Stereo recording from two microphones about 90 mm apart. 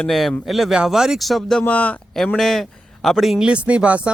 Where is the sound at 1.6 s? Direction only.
15° left (ahead or behind).